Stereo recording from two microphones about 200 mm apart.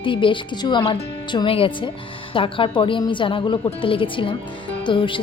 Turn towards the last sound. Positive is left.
turn(degrees=25)  # may be behind; listen again after turning